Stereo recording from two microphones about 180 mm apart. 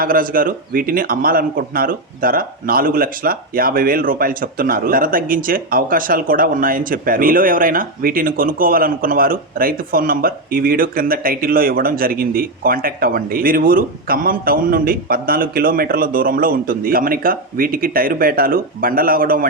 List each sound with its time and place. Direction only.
0.0 s speech: 50° right (ahead or behind)